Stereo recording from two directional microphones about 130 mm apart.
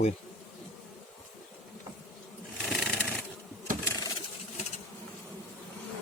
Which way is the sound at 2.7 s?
Centre (ahead or behind).